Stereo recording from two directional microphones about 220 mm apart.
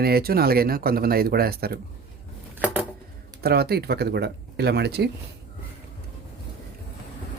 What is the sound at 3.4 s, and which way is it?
Speech, 45° right (ahead or behind).